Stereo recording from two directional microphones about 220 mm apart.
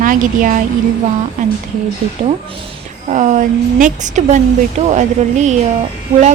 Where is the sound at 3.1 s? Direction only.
35° right (ahead or behind).